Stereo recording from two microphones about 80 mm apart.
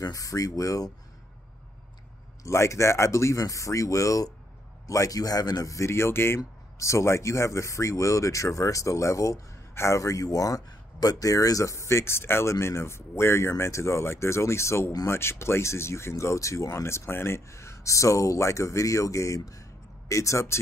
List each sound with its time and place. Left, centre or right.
0.0 s speech: left
2.4 s speech: left